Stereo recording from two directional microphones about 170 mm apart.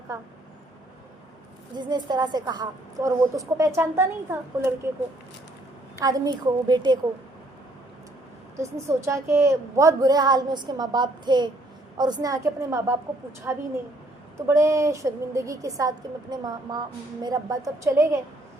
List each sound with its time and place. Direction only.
0.1 s a woman's voice: 20° right (ahead or behind)
1.7 s a woman's voice: 25° right (ahead or behind)
6.0 s a woman's voice: 20° right (ahead or behind)
8.5 s a woman's voice: 15° right (ahead or behind)
14.3 s a woman's voice: 15° right (ahead or behind)